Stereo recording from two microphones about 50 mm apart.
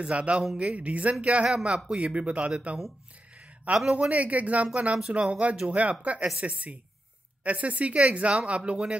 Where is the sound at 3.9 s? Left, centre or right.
Right.